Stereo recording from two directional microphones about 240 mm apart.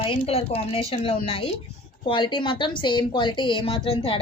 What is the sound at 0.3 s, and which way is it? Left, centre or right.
A woman's voice, left.